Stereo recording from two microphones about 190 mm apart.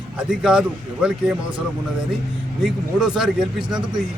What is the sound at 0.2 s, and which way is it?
A man's voice, 5° right (ahead or behind).